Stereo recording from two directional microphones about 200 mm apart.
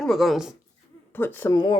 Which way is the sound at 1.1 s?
10° left (ahead or behind).